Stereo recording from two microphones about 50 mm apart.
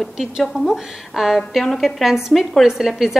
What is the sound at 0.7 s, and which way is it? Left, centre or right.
A woman's voice, centre.